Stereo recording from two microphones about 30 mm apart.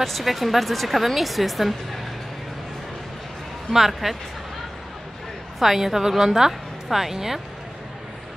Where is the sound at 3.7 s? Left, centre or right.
Centre.